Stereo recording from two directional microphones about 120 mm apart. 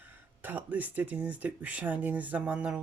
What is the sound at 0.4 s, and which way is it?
Speech, 15° right (ahead or behind).